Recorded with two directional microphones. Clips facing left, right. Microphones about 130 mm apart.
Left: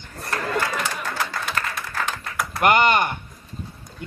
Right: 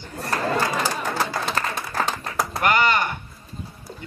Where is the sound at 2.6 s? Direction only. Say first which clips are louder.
Left 3 dB; 20° left (ahead or behind).